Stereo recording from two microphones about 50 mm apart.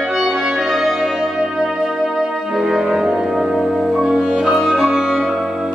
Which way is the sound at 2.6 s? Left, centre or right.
Centre.